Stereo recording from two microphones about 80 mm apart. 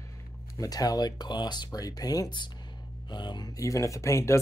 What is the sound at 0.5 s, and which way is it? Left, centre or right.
Speech, left.